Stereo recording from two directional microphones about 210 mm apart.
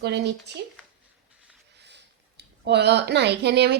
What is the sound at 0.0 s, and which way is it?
Speech, 55° right (ahead or behind).